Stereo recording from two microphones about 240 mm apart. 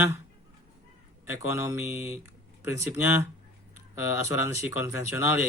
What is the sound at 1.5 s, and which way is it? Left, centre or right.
Speech, centre.